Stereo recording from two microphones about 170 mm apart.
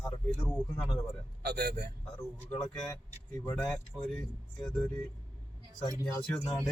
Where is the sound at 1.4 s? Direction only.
70° right (ahead or behind).